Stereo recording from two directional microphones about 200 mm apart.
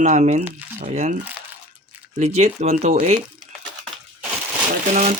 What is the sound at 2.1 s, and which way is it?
Speech, 35° right (ahead or behind).